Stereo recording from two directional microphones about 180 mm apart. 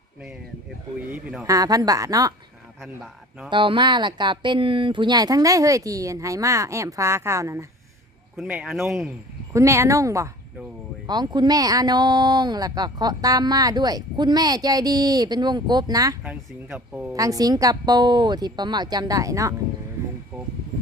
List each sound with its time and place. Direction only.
0.9 s speech: 10° right (ahead or behind)
1.5 s speech: 20° right (ahead or behind)
2.8 s a man's voice: centre (ahead or behind)
3.5 s speech: 25° right (ahead or behind)
8.4 s a man's voice: 5° right (ahead or behind)
9.5 s speech: 15° right (ahead or behind)
16.2 s speech: 5° right (ahead or behind)
17.2 s speech: 20° right (ahead or behind)